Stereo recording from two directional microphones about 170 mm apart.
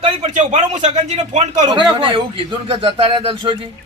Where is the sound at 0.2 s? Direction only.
45° right (ahead or behind).